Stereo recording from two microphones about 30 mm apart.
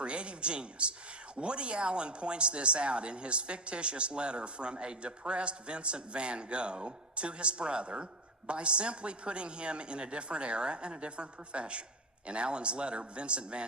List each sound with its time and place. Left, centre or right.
0.0 s a woman's voice: right